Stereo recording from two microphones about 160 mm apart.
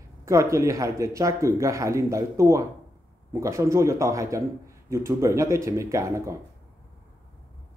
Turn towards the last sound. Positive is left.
turn(degrees=-20)  # may be behind; listen again after turning